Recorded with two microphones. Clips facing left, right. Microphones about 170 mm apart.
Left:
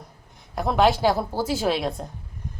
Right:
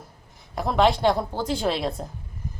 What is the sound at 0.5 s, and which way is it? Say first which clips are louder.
A woman's voice: left 1 dB; centre (ahead or behind).